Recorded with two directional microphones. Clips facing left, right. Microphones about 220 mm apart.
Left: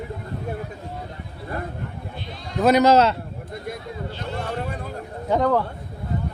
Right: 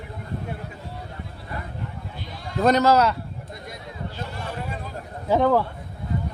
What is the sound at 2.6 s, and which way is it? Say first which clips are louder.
Speech: left 2 dB; 15° left (ahead or behind).